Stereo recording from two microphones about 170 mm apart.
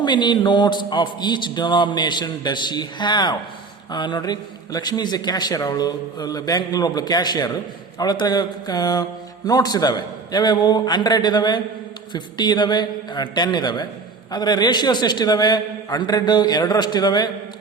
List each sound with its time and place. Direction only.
0.0 s a man's voice: 25° left (ahead or behind)